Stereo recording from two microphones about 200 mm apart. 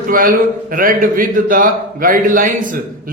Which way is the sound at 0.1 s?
45° right (ahead or behind).